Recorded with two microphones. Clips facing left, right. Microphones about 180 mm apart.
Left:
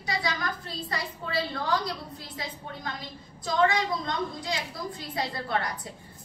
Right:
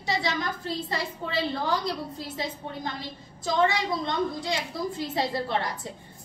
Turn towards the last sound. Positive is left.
turn(degrees=-25)  # may be behind; listen again after turning